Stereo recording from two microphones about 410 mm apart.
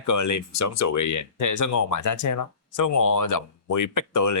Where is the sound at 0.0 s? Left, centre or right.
Left.